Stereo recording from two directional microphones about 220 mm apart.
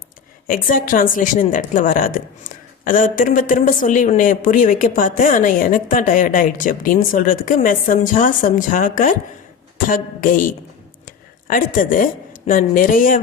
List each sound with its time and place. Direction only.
0.4 s a woman's voice: 40° left (ahead or behind)